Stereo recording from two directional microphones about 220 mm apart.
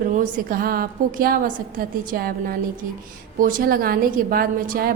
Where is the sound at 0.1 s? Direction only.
35° right (ahead or behind).